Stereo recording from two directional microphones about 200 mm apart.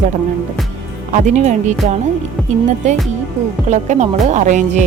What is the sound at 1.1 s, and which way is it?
Music, 35° right (ahead or behind).